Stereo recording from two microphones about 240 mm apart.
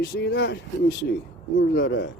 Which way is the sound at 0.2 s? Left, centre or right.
Left.